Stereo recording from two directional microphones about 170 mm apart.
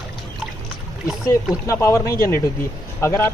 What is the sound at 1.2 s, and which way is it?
A man's voice, 20° left (ahead or behind).